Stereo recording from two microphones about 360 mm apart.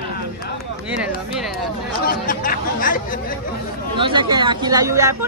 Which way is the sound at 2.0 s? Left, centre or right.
Left.